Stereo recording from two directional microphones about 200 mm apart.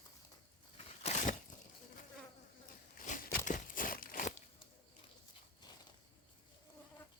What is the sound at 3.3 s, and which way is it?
Crumpling, 40° left (ahead or behind).